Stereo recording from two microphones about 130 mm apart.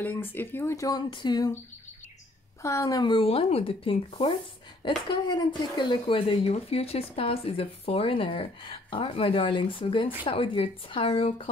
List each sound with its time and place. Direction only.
0.0 s speech: 15° left (ahead or behind); by 1.5 s 35° left (ahead or behind)
2.6 s speech: 25° left (ahead or behind); by 11.4 s 45° left (ahead or behind)